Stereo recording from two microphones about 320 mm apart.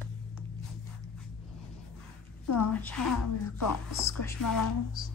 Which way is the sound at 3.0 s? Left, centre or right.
Left.